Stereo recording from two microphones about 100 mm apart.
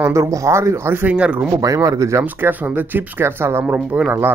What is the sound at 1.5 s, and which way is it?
Speech, 35° right (ahead or behind).